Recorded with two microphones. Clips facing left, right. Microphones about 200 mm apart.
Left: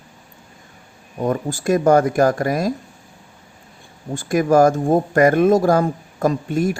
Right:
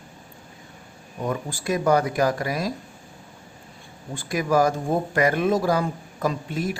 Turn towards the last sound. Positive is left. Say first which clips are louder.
# left 7 dB
turn(degrees=50)  # may be behind; listen again after turning